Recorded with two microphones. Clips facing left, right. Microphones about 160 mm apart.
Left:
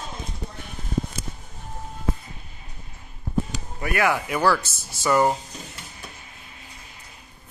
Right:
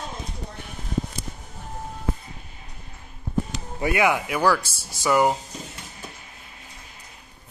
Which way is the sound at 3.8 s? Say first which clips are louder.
Right 2 dB; 20° right (ahead or behind).